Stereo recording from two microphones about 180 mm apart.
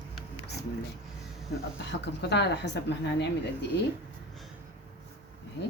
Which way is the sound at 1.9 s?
75° left (ahead or behind).